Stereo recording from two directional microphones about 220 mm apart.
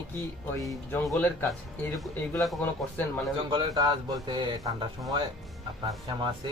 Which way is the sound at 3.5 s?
20° right (ahead or behind).